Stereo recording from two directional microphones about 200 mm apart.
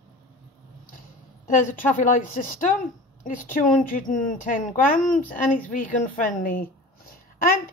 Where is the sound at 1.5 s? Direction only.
40° left (ahead or behind).